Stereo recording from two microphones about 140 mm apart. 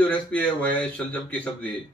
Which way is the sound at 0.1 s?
10° left (ahead or behind).